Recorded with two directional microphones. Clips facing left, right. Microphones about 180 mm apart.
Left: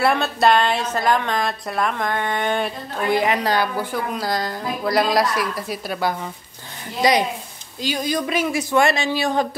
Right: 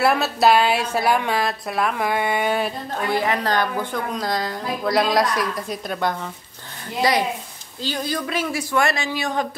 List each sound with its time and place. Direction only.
0.0 s a woman's voice: 5° right (ahead or behind)
3.1 s speech: 15° left (ahead or behind)
7.0 s speech: 15° left (ahead or behind)